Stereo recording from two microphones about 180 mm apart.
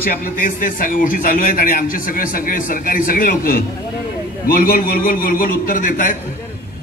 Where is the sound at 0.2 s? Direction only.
50° left (ahead or behind).